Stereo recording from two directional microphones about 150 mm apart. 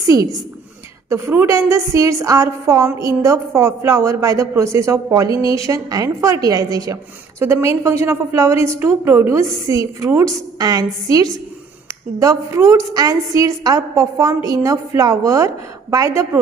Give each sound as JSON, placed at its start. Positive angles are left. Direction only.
{"t": 1.1, "sound": "a woman's voice", "side_deg": -15}
{"t": 12.2, "sound": "a woman's voice", "side_deg": -20}